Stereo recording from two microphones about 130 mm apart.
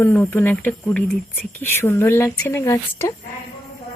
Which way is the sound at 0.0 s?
20° left (ahead or behind).